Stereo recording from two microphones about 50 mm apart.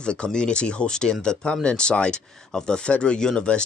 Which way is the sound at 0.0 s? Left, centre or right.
Centre.